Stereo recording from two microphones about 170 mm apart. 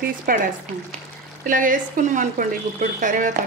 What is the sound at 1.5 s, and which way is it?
A woman's voice, 50° right (ahead or behind).